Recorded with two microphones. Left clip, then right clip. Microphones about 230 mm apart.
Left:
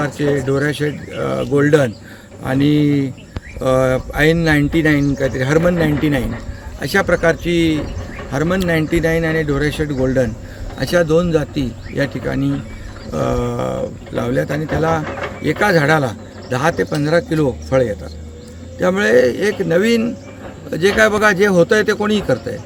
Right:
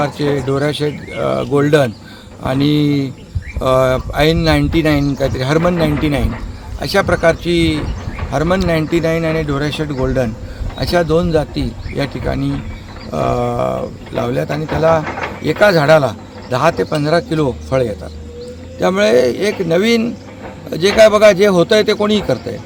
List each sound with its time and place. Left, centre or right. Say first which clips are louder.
0.6 s a man's voice: right 2 dB; centre
15.0 s speech: right 2 dB; right
15.4 s a man's voice: right 4 dB; centre